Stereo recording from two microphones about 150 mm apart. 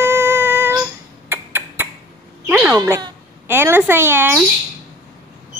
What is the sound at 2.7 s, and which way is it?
Speech, 15° right (ahead or behind).